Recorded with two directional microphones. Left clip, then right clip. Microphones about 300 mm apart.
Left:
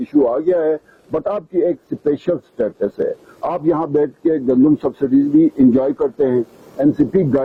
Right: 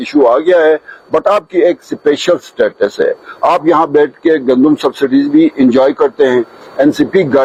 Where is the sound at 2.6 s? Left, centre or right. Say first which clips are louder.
Right 8 dB; centre.